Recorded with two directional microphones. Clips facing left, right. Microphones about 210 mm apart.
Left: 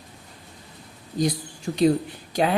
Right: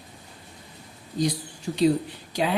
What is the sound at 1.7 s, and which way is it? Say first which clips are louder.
Speech: left 2 dB; 50° left (ahead or behind).